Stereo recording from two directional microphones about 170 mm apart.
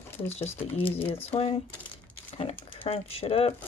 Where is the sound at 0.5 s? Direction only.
10° left (ahead or behind).